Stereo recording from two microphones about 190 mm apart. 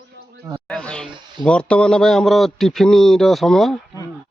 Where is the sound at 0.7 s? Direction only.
5° left (ahead or behind).